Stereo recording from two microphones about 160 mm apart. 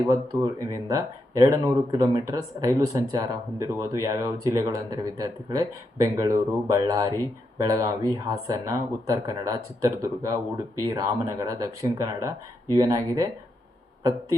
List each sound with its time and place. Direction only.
0.0 s speech: 20° right (ahead or behind)